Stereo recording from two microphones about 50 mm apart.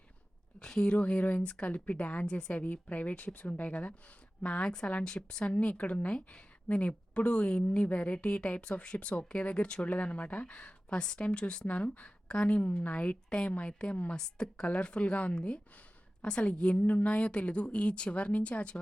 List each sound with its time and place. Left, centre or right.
0.6 s a woman's voice: centre
0.9 s a woman's voice: left